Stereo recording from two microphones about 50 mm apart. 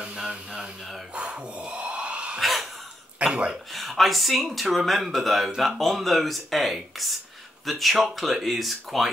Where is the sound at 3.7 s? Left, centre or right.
Centre.